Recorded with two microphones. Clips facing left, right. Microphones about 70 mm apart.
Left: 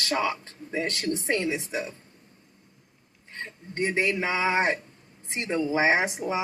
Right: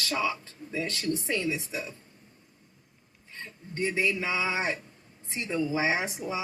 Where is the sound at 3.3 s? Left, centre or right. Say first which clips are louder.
Left 4 dB; left.